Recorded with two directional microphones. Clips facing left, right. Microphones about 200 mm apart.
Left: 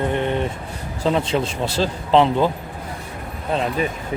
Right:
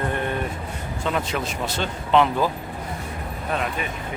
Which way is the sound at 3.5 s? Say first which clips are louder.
Left 5 dB; 25° left (ahead or behind).